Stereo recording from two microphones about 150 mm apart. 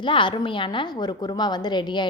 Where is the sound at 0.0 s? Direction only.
35° left (ahead or behind).